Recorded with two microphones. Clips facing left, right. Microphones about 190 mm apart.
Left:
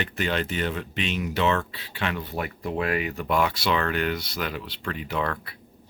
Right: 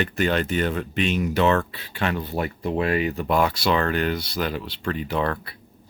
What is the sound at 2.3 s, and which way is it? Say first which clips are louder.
Speech: right 4 dB; 30° right (ahead or behind).